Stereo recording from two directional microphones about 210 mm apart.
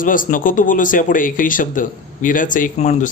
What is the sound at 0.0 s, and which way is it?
Speech, 40° left (ahead or behind).